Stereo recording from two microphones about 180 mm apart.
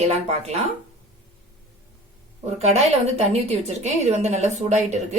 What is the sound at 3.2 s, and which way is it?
A woman's voice, 35° right (ahead or behind).